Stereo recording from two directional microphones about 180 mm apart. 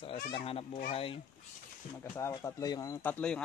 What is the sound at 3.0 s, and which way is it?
Speech, 5° left (ahead or behind).